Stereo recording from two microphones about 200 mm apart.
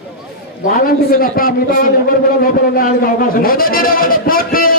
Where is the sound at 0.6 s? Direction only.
45° left (ahead or behind).